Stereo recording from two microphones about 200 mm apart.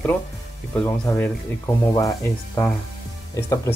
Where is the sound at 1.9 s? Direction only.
15° left (ahead or behind).